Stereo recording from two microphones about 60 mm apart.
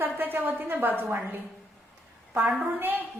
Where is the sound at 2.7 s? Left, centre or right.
Right.